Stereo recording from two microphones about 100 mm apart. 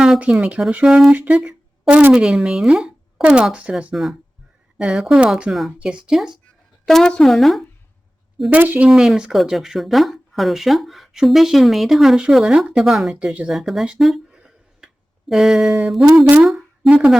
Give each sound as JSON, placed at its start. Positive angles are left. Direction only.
{"t": 0.0, "sound": "speech", "side_deg": -10}
{"t": 8.4, "sound": "speech", "side_deg": -15}
{"t": 8.9, "sound": "speech", "side_deg": -5}
{"t": 13.5, "sound": "speech", "side_deg": 0}
{"t": 14.0, "sound": "a sound", "side_deg": -5}
{"t": 15.3, "sound": "speech", "side_deg": 0}
{"t": 16.4, "sound": "a sound", "side_deg": 0}
{"t": 16.9, "sound": "speech", "side_deg": -10}